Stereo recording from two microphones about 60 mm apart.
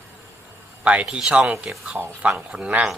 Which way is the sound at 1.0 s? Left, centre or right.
Centre.